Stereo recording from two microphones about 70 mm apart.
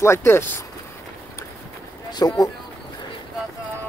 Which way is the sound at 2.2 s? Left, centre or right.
Left.